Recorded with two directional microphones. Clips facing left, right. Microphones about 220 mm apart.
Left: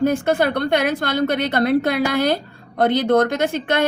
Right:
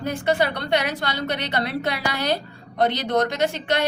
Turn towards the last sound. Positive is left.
turn(degrees=50)  # may be behind; listen again after turning